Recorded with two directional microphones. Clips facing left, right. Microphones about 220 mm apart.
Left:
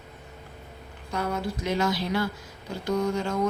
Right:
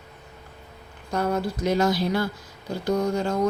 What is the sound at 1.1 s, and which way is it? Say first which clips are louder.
A woman's voice: right 4 dB; 40° right (ahead or behind).